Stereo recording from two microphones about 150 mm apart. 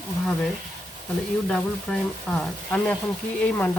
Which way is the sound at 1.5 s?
5° left (ahead or behind).